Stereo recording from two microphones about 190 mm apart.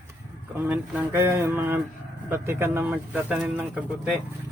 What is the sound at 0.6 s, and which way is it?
Speech, 10° right (ahead or behind).